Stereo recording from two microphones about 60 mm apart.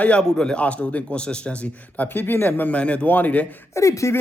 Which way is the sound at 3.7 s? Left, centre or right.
Left.